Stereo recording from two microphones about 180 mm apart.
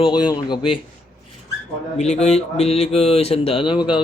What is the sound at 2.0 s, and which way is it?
Speech, 35° left (ahead or behind).